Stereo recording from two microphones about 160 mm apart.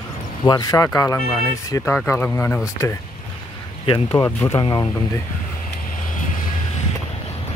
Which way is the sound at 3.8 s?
35° left (ahead or behind).